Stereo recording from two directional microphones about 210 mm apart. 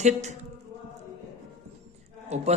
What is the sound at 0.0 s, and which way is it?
Speech, 35° right (ahead or behind).